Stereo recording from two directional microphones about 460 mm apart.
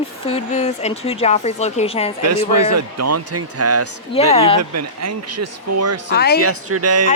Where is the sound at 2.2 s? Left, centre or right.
Right.